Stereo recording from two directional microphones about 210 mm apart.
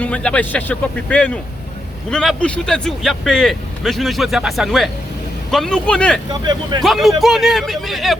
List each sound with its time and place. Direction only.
0.0 s speech: 5° left (ahead or behind)
6.3 s speech: 20° right (ahead or behind)
6.8 s speech: centre (ahead or behind)